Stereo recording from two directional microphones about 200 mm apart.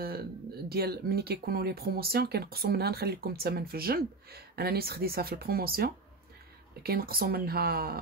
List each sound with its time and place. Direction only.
0.0 s speech: 50° right (ahead or behind)